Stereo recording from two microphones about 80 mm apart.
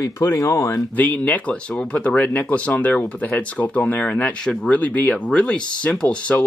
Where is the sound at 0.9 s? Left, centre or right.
Centre.